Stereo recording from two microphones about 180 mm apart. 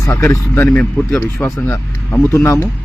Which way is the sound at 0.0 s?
15° left (ahead or behind).